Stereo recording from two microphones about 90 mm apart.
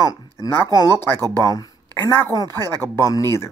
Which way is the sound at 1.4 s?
40° left (ahead or behind).